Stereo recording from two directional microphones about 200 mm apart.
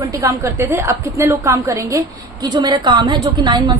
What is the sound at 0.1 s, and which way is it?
A woman's voice, 15° right (ahead or behind).